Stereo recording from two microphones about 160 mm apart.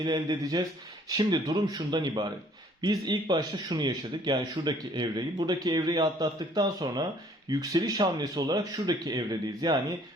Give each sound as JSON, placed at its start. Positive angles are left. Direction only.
{"t": 0.0, "sound": "speech", "side_deg": -25}